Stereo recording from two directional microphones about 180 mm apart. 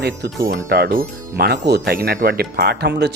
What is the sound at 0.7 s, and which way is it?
Speech, 60° right (ahead or behind).